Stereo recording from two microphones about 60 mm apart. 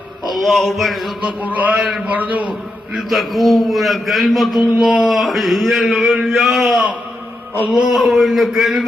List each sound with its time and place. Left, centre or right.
0.3 s a man's voice: centre
1.2 s speech: right
3.1 s a man's voice: centre
7.6 s music: centre
7.9 s a man's voice: centre